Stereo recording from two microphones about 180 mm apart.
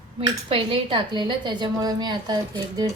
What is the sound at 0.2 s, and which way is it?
A woman's voice, 30° right (ahead or behind).